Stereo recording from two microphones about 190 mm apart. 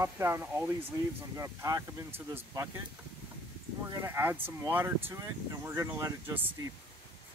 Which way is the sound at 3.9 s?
15° right (ahead or behind).